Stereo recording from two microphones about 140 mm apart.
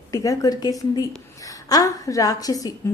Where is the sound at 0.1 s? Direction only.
25° left (ahead or behind).